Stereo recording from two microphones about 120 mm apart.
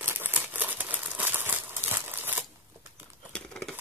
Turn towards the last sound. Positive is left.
turn(degrees=5)  # may be behind; listen again after turning